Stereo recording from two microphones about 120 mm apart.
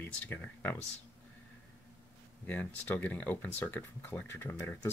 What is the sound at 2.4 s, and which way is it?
Speech, 15° left (ahead or behind).